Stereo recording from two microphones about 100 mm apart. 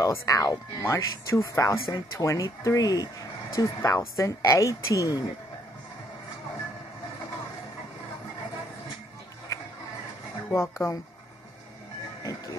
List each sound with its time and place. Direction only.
0.0 s speech: 30° left (ahead or behind)
10.5 s speech: 30° left (ahead or behind)
12.2 s music: 35° left (ahead or behind)